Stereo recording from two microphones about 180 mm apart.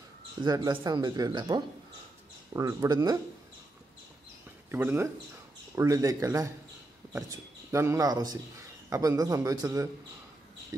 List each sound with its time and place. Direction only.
0.4 s speech: 25° right (ahead or behind)
4.6 s speech: 10° right (ahead or behind)